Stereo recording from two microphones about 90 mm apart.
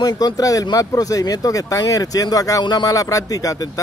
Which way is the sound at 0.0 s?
45° left (ahead or behind).